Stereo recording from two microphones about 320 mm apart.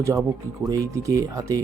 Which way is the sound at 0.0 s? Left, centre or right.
Centre.